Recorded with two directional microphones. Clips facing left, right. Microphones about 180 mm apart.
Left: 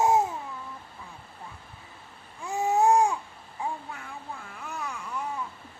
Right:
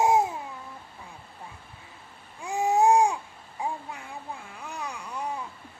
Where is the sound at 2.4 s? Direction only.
15° right (ahead or behind).